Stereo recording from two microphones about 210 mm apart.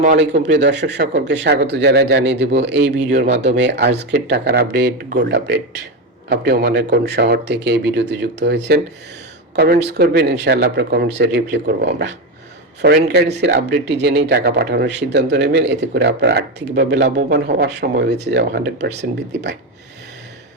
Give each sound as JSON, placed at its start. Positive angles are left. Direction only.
{"t": 0.2, "sound": "a man's voice", "side_deg": -60}